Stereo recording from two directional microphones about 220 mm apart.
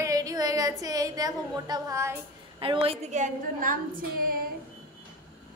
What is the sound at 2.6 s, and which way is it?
A woman's voice, 25° right (ahead or behind).